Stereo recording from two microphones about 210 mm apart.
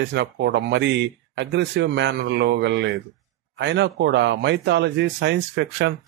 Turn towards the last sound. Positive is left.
turn(degrees=-55)  # may be behind; listen again after turning